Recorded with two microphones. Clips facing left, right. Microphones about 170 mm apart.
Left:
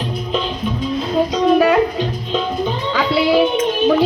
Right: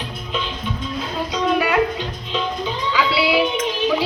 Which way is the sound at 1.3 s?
45° left (ahead or behind).